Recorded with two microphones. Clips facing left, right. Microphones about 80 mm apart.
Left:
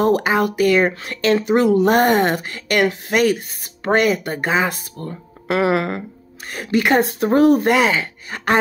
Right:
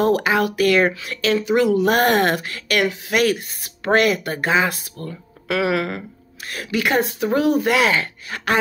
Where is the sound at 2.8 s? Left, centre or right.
Left.